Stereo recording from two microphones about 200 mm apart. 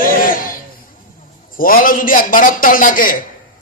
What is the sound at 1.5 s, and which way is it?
A man's voice, 45° left (ahead or behind).